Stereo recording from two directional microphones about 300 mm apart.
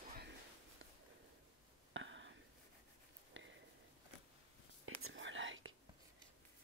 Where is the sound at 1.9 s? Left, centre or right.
Right.